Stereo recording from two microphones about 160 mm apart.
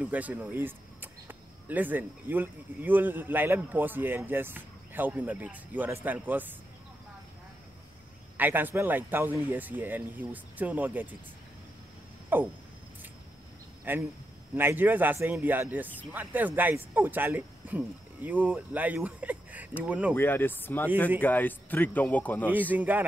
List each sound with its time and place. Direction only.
0.0 s speech: 10° right (ahead or behind)
8.4 s speech: 10° right (ahead or behind)
12.3 s speech: 15° right (ahead or behind)
13.9 s speech: 10° right (ahead or behind)
20.2 s speech: 15° left (ahead or behind)
22.5 s speech: 10° right (ahead or behind)